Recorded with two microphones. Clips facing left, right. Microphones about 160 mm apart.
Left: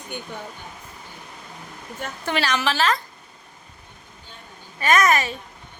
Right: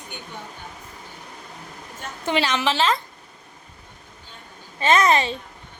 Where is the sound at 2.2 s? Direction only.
20° right (ahead or behind).